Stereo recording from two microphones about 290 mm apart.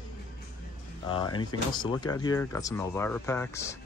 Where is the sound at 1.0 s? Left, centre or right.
Centre.